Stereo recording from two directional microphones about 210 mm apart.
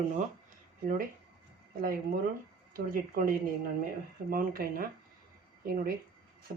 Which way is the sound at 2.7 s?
40° right (ahead or behind).